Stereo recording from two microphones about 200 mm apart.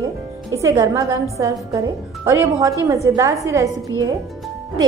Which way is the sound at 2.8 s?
15° right (ahead or behind).